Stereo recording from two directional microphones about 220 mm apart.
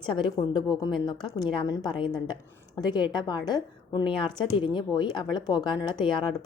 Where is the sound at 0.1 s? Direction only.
20° left (ahead or behind).